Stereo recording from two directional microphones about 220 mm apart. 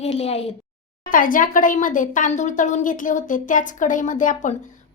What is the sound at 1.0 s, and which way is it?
A woman's voice, 40° left (ahead or behind).